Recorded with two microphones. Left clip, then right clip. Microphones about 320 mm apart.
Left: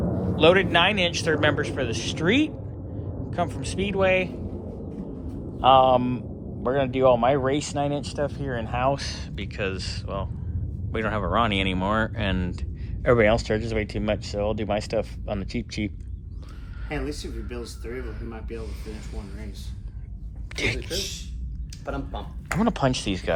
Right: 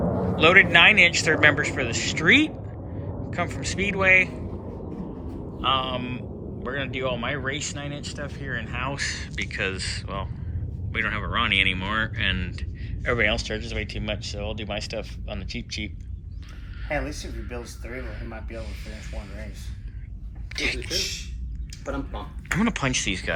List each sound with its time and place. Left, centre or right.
0.3 s speech: centre
5.5 s speech: centre
16.9 s speech: centre
18.6 s speech: centre
20.5 s speech: left
22.1 s speech: centre